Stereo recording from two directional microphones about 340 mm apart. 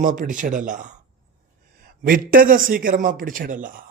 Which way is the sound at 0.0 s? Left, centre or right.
Right.